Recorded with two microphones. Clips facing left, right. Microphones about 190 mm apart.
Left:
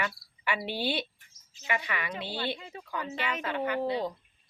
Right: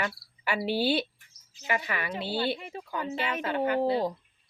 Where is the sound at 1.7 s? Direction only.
35° right (ahead or behind).